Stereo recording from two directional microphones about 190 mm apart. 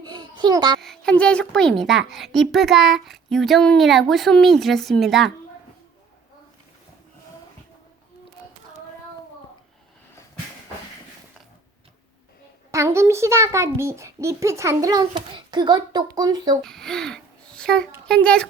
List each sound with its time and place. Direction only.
0.0 s babbling: 20° right (ahead or behind)
0.8 s speech: 5° left (ahead or behind)
12.7 s a child's voice: 15° right (ahead or behind)
16.6 s a child's voice: centre (ahead or behind)